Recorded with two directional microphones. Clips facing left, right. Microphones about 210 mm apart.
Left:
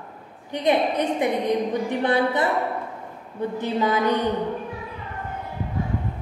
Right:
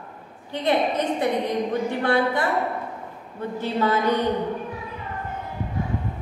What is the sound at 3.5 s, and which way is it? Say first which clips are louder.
Speech: right 1 dB; 15° left (ahead or behind).